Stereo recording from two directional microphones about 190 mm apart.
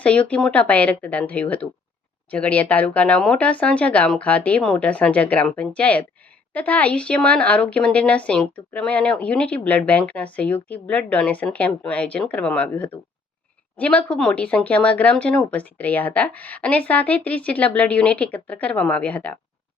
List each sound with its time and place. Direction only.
0.0 s speech: 5° left (ahead or behind)